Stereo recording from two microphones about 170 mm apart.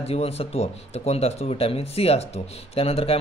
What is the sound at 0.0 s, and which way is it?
Speech, 35° left (ahead or behind).